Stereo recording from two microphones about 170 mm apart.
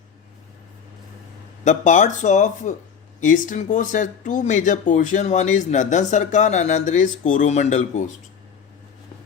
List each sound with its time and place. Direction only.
1.6 s speech: 45° left (ahead or behind)